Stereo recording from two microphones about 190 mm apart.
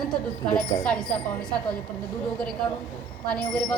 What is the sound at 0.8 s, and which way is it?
Speech, 5° left (ahead or behind).